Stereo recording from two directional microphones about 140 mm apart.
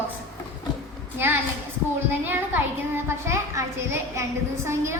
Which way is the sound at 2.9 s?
20° right (ahead or behind).